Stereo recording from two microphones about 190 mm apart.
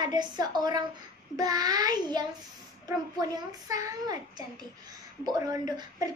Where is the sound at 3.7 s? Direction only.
15° right (ahead or behind).